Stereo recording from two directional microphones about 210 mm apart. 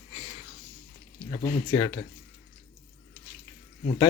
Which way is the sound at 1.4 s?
20° left (ahead or behind).